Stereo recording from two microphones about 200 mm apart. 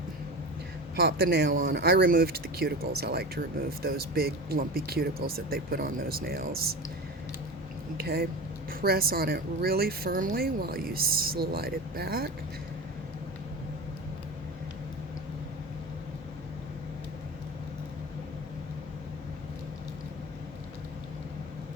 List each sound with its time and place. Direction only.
0.9 s a woman's voice: 55° right (ahead or behind)
7.9 s a woman's voice: 50° right (ahead or behind)